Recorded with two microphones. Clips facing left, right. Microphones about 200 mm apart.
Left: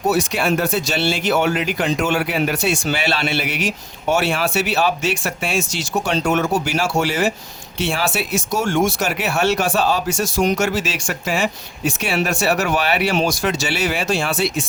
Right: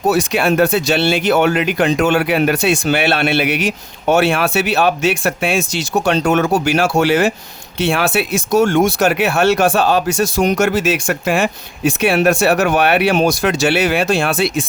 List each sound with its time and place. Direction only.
0.1 s speech: 65° right (ahead or behind)